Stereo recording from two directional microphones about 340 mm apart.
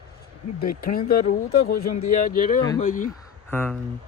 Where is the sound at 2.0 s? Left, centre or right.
Left.